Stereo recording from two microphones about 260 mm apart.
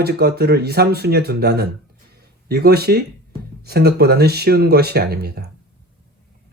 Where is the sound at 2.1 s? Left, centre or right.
Right.